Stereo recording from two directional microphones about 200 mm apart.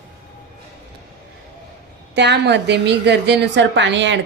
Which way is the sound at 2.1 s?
60° right (ahead or behind).